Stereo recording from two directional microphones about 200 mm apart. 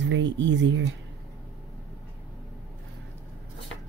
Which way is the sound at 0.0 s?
65° right (ahead or behind).